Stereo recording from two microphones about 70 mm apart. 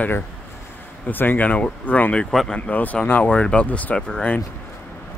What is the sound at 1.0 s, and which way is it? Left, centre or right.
Speech, left.